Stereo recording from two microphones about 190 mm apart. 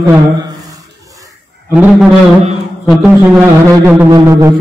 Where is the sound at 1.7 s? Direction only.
5° right (ahead or behind).